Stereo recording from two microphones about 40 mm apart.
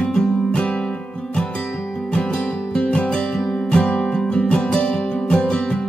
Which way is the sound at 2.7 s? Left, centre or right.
Left.